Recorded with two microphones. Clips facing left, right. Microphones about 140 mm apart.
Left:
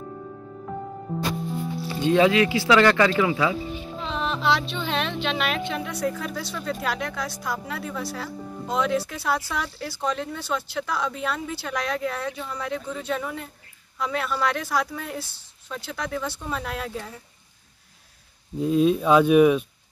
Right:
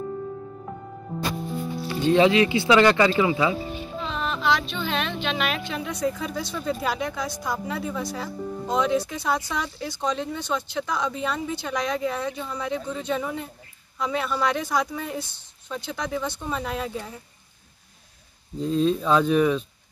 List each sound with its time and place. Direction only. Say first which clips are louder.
2.1 s speech: even; 20° right (ahead or behind)
4.0 s music: left 1 dB; 20° left (ahead or behind)
4.7 s a woman's voice: left 1 dB; 5° right (ahead or behind)
18.6 s speech: left 2 dB; 10° left (ahead or behind)